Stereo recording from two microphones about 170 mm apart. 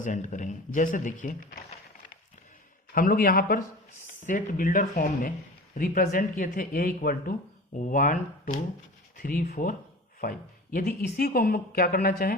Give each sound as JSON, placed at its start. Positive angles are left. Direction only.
{"t": 0.0, "sound": "speech", "side_deg": 45}
{"t": 2.9, "sound": "speech", "side_deg": 55}